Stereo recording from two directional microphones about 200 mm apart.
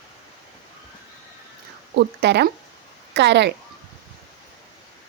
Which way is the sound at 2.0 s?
60° right (ahead or behind).